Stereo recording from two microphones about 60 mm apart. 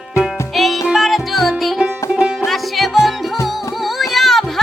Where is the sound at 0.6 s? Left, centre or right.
Centre.